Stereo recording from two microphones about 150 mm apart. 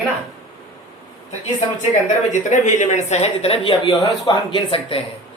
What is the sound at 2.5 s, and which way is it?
A woman's voice, 55° left (ahead or behind).